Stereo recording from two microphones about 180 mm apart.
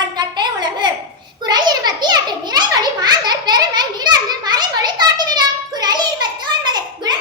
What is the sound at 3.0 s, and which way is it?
Children playing, 25° right (ahead or behind).